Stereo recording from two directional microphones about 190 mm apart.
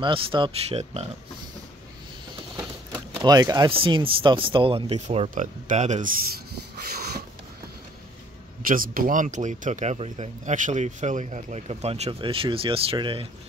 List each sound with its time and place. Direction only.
0.0 s speech: 25° right (ahead or behind)
3.2 s speech: 20° right (ahead or behind); by 6.1 s 40° right (ahead or behind)
6.9 s a sound: 55° right (ahead or behind)
8.6 s speech: 45° right (ahead or behind); by 13.3 s 25° right (ahead or behind)